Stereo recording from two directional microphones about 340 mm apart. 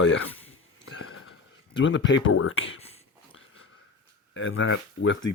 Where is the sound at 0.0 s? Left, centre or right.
Left.